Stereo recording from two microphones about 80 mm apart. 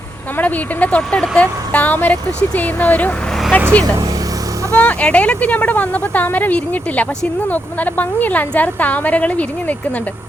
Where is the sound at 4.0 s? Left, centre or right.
Right.